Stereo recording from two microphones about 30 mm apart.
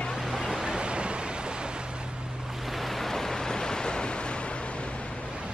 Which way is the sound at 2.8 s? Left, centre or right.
Centre.